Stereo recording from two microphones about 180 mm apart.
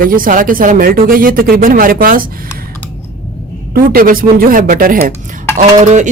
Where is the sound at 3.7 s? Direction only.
55° right (ahead or behind).